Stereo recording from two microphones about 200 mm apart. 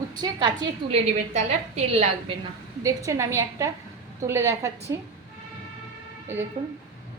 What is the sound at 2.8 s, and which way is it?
A woman's voice, 15° right (ahead or behind).